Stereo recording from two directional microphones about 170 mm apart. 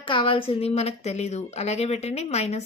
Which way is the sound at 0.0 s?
30° left (ahead or behind).